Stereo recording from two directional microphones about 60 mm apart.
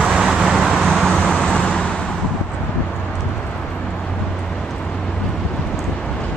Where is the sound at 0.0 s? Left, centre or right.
Centre.